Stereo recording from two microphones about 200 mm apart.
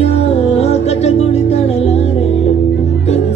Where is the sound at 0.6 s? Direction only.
30° left (ahead or behind).